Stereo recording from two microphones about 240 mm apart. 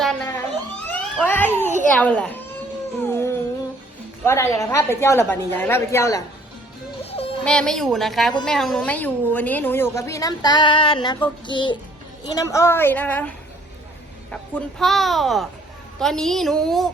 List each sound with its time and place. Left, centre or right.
0.0 s a sound: centre
0.9 s police car: centre
1.9 s speech: centre
3.0 s music: centre
4.2 s a woman's voice: centre
7.0 s music: left
7.4 s a woman's voice: centre